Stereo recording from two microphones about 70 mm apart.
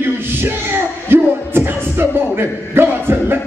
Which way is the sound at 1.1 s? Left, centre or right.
Right.